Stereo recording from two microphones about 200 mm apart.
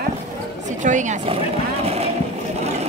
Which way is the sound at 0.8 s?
40° right (ahead or behind).